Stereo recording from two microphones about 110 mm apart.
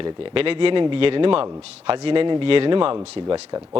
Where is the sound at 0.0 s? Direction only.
55° right (ahead or behind).